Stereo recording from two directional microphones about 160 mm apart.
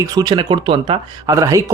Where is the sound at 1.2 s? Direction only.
20° right (ahead or behind).